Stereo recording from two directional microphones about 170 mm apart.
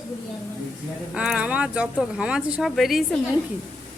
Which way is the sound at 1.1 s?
5° right (ahead or behind).